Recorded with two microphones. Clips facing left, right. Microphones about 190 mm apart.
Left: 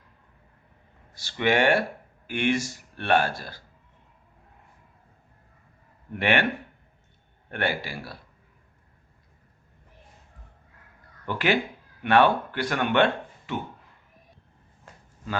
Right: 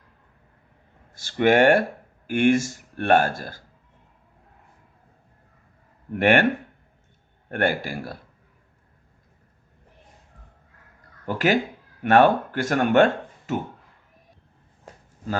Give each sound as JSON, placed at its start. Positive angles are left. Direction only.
{"t": 1.1, "sound": "speech", "side_deg": -50}
{"t": 6.1, "sound": "speech", "side_deg": -50}
{"t": 7.5, "sound": "speech", "side_deg": -50}
{"t": 11.3, "sound": "speech", "side_deg": -40}